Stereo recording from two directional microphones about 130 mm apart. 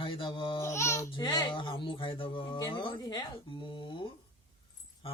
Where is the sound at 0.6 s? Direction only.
20° left (ahead or behind).